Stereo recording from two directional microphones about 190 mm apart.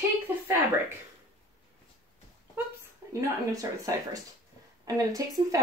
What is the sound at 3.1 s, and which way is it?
A woman's voice, 15° right (ahead or behind).